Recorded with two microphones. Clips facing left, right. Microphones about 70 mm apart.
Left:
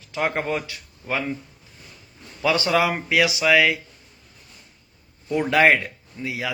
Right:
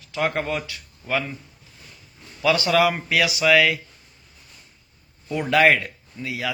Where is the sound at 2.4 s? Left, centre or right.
Left.